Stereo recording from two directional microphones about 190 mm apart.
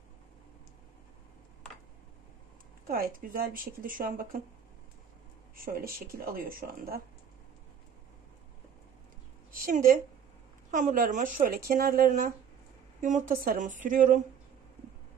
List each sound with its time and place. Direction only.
2.9 s speech: 50° right (ahead or behind)
5.6 s speech: 50° right (ahead or behind)
9.5 s a sound: 50° right (ahead or behind)
10.7 s speech: 40° right (ahead or behind)